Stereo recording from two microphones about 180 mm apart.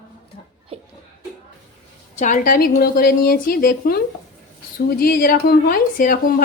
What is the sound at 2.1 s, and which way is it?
A woman's voice, 45° left (ahead or behind).